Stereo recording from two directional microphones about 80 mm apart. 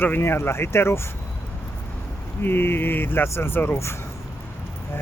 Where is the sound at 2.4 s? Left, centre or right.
Left.